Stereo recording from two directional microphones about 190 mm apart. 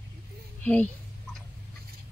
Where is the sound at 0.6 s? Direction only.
5° left (ahead or behind).